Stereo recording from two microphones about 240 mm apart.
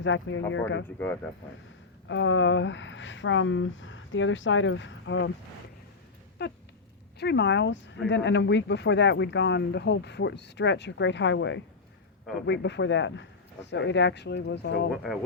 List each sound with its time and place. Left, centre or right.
0.0 s speech: left
2.0 s speech: left
6.4 s speech: left
14.8 s speech: centre